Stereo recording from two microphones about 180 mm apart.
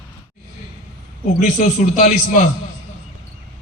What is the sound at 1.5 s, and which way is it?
Speech, 45° left (ahead or behind).